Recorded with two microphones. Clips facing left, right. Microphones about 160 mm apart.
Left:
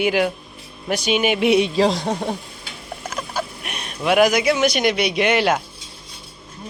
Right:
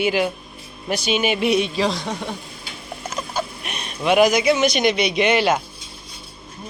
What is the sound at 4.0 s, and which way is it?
Speech, 5° left (ahead or behind).